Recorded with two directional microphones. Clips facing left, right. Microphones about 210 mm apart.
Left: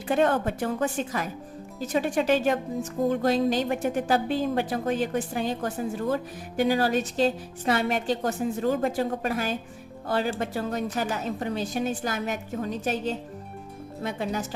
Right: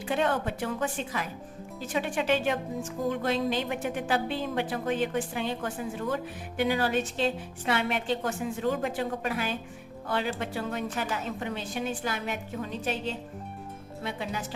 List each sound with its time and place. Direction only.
0.1 s a woman's voice: 45° left (ahead or behind)